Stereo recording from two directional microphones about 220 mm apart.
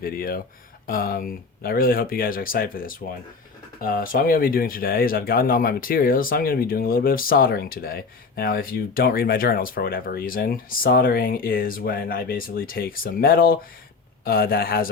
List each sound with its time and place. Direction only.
0.0 s a man's voice: 40° left (ahead or behind)